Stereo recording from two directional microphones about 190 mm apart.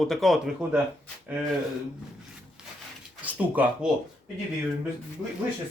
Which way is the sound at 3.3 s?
10° right (ahead or behind).